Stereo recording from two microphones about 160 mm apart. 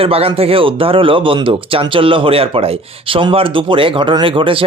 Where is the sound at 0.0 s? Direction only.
35° right (ahead or behind).